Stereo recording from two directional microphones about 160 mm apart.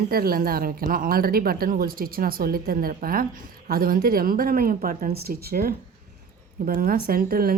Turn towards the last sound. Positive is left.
turn(degrees=-65)  # may be behind; listen again after turning